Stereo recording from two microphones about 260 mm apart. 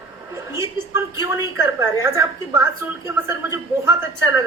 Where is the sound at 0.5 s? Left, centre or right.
Centre.